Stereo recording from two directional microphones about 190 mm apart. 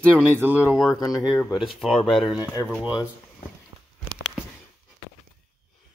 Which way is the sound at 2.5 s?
20° left (ahead or behind).